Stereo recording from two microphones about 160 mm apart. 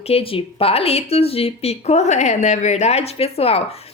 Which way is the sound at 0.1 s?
35° left (ahead or behind).